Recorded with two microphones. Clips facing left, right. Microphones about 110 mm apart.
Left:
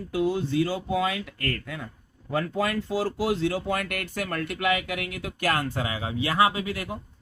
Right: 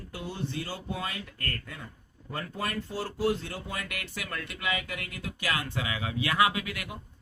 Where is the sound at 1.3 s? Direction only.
90° left.